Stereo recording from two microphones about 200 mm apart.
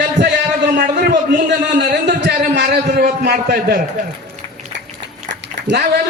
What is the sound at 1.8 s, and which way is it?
A man's voice, 55° right (ahead or behind).